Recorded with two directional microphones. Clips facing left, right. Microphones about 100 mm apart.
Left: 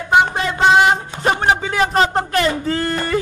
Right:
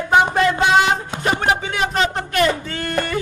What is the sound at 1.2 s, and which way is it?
Speech, 35° left (ahead or behind).